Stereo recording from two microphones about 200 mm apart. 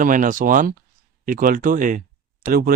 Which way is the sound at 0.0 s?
40° right (ahead or behind).